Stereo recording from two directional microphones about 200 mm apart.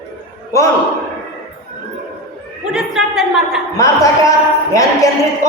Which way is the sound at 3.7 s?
15° left (ahead or behind).